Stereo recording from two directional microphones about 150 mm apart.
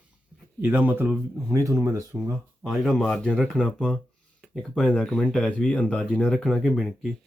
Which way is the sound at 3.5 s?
5° right (ahead or behind).